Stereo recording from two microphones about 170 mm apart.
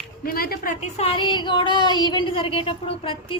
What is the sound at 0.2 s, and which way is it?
Speech, 65° left (ahead or behind).